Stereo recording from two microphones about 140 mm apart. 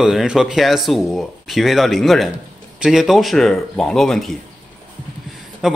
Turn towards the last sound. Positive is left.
turn(degrees=-5)  # may be behind; listen again after turning